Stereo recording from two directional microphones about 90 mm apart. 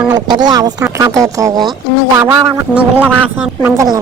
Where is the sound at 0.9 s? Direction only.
40° right (ahead or behind).